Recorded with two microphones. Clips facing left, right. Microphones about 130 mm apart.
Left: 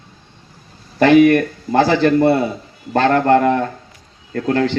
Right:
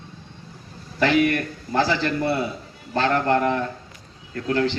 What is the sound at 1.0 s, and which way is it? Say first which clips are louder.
A man's voice: left 9 dB; 55° left (ahead or behind).